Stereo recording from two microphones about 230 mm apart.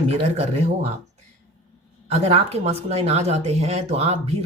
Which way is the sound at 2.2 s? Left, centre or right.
Right.